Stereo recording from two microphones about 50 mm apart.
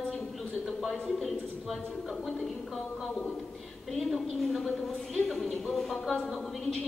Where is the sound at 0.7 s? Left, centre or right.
Centre.